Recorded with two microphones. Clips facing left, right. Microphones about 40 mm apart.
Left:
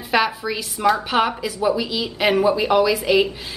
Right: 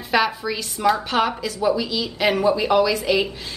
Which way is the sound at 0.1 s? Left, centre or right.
Centre.